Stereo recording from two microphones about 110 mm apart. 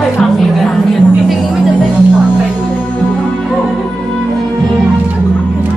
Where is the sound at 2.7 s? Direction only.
15° left (ahead or behind).